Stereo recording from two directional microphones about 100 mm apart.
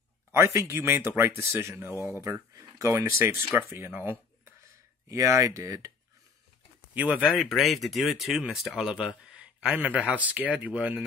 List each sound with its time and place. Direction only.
0.3 s speech: 30° right (ahead or behind)
6.9 s speech: 15° right (ahead or behind)
7.3 s speech: centre (ahead or behind)